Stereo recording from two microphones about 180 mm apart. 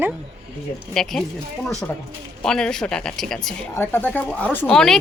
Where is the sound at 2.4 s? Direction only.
5° left (ahead or behind).